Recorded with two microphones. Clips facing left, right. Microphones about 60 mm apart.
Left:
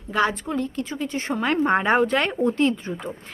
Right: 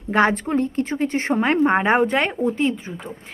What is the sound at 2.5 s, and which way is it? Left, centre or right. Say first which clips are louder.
Speech: left 1 dB; centre.